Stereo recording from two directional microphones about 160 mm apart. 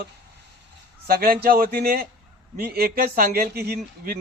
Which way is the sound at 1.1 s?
65° right (ahead or behind).